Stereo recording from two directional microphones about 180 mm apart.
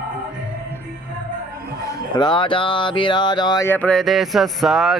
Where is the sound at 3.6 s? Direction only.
10° left (ahead or behind).